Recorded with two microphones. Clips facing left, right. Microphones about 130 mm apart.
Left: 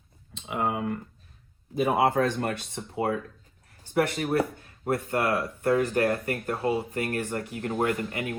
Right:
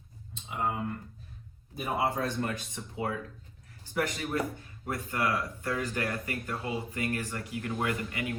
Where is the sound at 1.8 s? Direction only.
70° left (ahead or behind).